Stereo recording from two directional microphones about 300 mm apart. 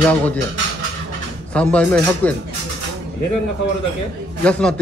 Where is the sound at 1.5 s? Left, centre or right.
Centre.